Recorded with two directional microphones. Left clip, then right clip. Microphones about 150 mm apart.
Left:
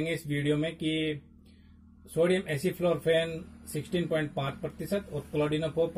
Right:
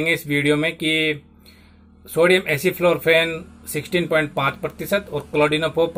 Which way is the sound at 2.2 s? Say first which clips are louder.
Right 11 dB; 5° left (ahead or behind).